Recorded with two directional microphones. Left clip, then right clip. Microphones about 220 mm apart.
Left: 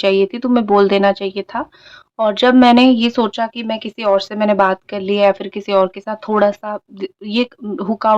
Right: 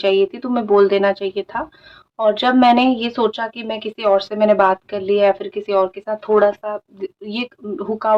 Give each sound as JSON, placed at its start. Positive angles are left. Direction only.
{"t": 0.0, "sound": "speech", "side_deg": 35}